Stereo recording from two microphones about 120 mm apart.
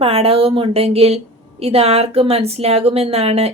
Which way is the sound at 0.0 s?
55° right (ahead or behind).